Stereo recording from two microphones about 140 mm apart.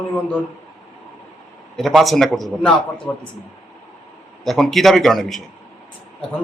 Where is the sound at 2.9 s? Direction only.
35° left (ahead or behind).